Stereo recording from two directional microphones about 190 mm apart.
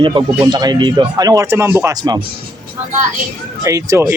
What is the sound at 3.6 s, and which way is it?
Speech, 15° right (ahead or behind).